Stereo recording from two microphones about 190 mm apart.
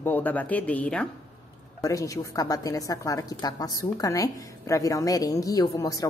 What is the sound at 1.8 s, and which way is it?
A woman's voice, 15° left (ahead or behind).